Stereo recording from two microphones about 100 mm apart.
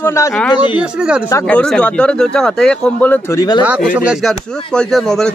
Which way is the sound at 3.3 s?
45° left (ahead or behind).